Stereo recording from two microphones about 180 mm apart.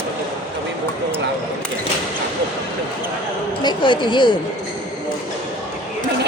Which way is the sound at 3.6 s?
25° left (ahead or behind).